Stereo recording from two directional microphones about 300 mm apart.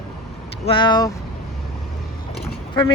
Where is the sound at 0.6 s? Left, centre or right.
Centre.